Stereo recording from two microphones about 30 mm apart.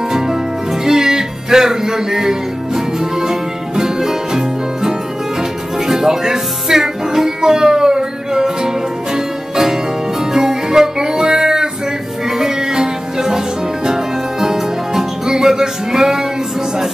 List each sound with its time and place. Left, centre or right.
0.8 s music: centre